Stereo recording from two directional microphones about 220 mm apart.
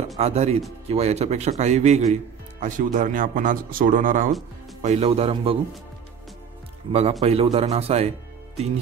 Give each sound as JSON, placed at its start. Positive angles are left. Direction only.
{"t": 0.2, "sound": "speech", "side_deg": -30}
{"t": 6.9, "sound": "speech", "side_deg": -30}